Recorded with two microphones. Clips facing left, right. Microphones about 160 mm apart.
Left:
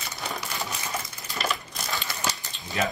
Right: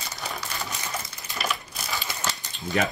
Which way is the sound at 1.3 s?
Centre (ahead or behind).